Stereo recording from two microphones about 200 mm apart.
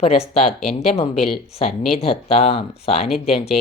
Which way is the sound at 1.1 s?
Centre (ahead or behind).